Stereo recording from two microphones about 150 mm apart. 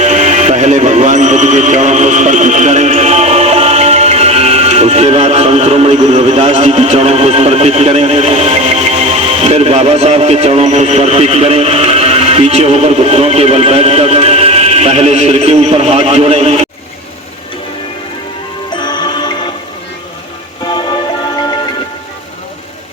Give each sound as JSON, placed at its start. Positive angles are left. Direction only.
{"t": 0.0, "sound": "speech", "side_deg": -50}
{"t": 18.8, "sound": "music", "side_deg": 30}